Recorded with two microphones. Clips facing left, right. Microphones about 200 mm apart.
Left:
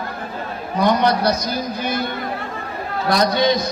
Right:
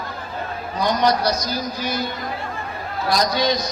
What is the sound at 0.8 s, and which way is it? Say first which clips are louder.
Speech: left 2 dB; 60° left (ahead or behind).